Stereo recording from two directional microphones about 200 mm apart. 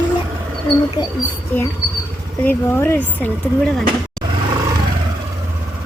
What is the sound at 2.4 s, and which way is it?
Speech, 10° left (ahead or behind).